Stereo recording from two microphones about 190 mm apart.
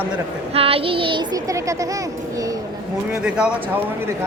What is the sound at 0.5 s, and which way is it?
Child singing, 30° right (ahead or behind).